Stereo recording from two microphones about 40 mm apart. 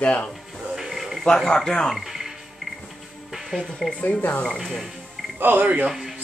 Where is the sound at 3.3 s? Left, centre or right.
Centre.